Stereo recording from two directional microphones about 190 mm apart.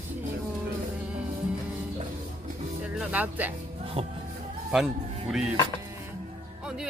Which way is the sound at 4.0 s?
30° right (ahead or behind).